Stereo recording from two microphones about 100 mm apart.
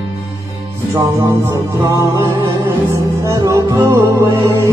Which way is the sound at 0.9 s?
30° right (ahead or behind).